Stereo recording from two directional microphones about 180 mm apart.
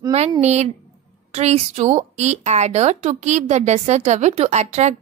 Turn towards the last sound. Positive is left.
turn(degrees=-40)  # may be behind; listen again after turning